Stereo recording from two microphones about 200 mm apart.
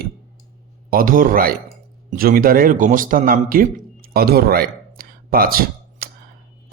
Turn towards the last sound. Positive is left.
turn(degrees=-45)  # may be behind; listen again after turning